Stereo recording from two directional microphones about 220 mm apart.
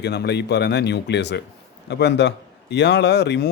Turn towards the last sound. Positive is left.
turn(degrees=50)  # may be behind; listen again after turning